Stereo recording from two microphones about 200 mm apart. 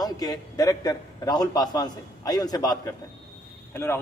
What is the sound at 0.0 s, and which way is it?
A man's voice, 20° left (ahead or behind).